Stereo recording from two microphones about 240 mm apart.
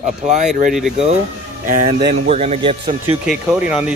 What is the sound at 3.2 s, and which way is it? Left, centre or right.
Speech, centre.